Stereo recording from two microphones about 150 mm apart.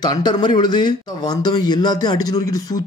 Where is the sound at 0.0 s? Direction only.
30° left (ahead or behind).